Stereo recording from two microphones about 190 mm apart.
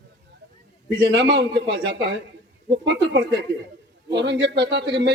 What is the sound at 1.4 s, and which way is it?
A man's voice, 65° right (ahead or behind).